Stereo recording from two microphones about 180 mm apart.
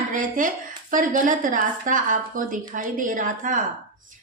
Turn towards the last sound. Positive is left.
turn(degrees=-45)  # may be behind; listen again after turning